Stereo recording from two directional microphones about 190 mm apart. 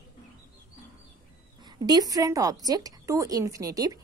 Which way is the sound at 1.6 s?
20° right (ahead or behind).